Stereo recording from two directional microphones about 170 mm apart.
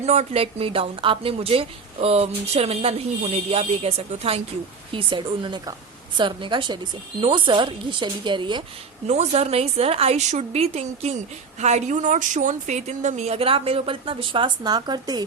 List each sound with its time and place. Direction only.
0.0 s a woman's voice: 40° right (ahead or behind)
9.0 s a woman's voice: 40° right (ahead or behind)